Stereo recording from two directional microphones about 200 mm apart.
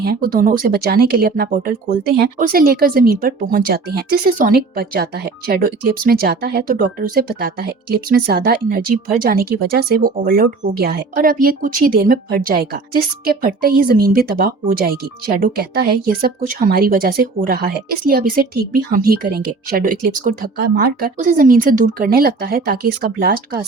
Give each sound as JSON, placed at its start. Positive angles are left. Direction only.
{"t": 0.0, "sound": "speech", "side_deg": -50}